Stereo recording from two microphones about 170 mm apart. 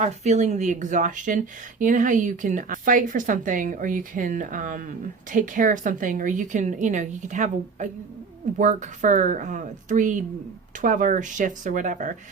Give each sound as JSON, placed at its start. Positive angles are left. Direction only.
{"t": 0.0, "sound": "speech", "side_deg": -45}